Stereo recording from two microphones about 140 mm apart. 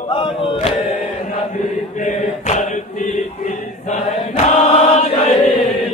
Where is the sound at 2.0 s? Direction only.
55° left (ahead or behind).